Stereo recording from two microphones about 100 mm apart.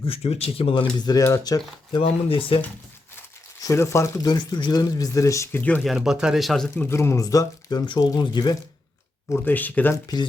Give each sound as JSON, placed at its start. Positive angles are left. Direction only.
{"t": 0.0, "sound": "speech", "side_deg": 75}
{"t": 1.2, "sound": "speech", "side_deg": 30}
{"t": 1.5, "sound": "speech", "side_deg": 45}
{"t": 2.0, "sound": "speech", "side_deg": 65}
{"t": 3.6, "sound": "speech", "side_deg": 30}
{"t": 4.2, "sound": "speech", "side_deg": 45}
{"t": 5.5, "sound": "speech", "side_deg": 15}
{"t": 5.8, "sound": "speech", "side_deg": -5}
{"t": 6.8, "sound": "speech", "side_deg": 25}
{"t": 7.9, "sound": "speech", "side_deg": 45}
{"t": 9.3, "sound": "speech", "side_deg": 20}
{"t": 9.9, "sound": "speech", "side_deg": 40}